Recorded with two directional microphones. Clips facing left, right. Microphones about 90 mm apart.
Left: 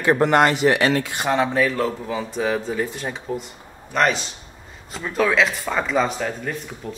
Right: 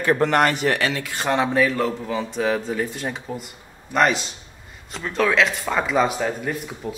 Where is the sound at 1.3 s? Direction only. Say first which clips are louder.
Even; centre (ahead or behind).